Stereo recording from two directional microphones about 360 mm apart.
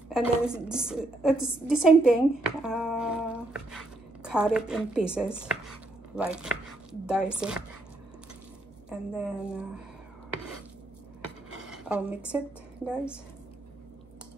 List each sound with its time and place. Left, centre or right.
0.1 s a woman's voice: centre
8.8 s a woman's voice: centre
11.6 s a sound: centre
12.8 s a woman's voice: centre